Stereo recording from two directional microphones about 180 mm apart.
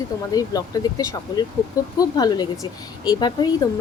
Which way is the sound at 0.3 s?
20° left (ahead or behind).